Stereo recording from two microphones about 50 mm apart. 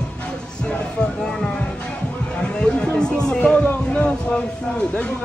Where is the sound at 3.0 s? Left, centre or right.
Centre.